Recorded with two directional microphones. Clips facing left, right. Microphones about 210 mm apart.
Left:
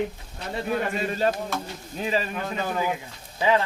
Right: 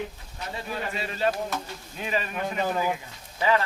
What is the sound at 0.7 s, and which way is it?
Speech, 45° left (ahead or behind).